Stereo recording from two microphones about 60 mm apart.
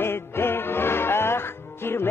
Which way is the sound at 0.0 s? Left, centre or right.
Left.